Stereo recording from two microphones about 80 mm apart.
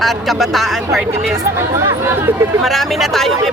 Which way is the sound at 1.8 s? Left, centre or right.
Right.